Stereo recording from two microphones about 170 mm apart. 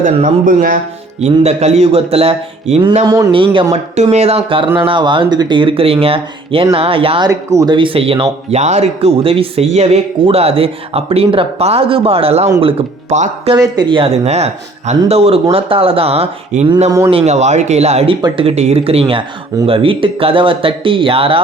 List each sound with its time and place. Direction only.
0.0 s speech: 50° right (ahead or behind)
1.2 s speech: 40° right (ahead or behind)
3.1 s speech: 25° right (ahead or behind)
7.3 s speech: 20° right (ahead or behind); by 13.5 s 40° right (ahead or behind)
13.5 s speech: 25° right (ahead or behind)